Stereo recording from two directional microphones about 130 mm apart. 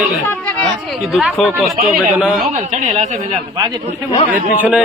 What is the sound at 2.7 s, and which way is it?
Speech, 65° right (ahead or behind).